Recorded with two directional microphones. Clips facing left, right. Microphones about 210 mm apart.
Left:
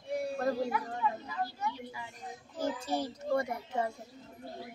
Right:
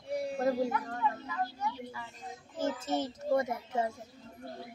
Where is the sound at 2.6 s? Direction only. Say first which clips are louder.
Right 1 dB; 20° right (ahead or behind).